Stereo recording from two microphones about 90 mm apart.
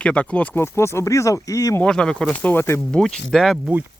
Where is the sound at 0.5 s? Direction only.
30° left (ahead or behind).